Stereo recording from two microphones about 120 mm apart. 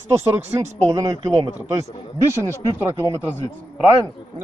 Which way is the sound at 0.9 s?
25° right (ahead or behind).